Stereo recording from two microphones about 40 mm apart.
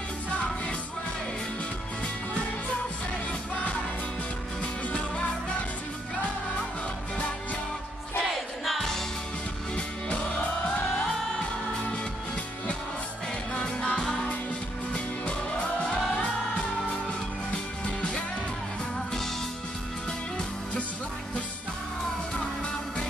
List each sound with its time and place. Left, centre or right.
4.9 s music: left
8.2 s music: centre
9.8 s music: left
13.6 s music: left
17.5 s music: left